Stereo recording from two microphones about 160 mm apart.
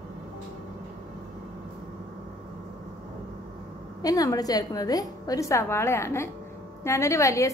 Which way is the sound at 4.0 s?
25° left (ahead or behind).